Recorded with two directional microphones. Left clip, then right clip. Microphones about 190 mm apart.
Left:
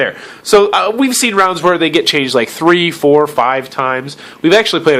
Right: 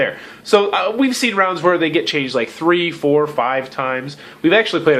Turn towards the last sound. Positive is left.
turn(degrees=45)  # may be behind; listen again after turning